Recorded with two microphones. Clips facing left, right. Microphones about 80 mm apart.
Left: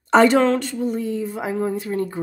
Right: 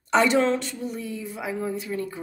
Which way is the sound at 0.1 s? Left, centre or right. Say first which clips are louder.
Left 6 dB; left.